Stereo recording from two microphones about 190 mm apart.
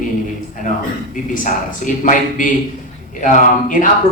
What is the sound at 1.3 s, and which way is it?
A man's voice, 45° left (ahead or behind).